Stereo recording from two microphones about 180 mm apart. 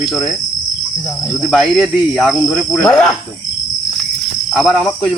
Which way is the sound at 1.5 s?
Centre (ahead or behind).